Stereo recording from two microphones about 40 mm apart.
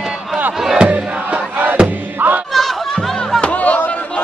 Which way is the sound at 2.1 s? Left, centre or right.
Right.